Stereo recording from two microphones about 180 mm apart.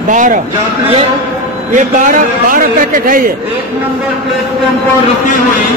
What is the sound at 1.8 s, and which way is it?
A man's voice, 45° right (ahead or behind).